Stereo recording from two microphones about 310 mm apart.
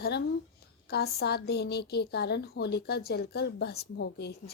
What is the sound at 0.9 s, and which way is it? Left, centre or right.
A woman's voice, left.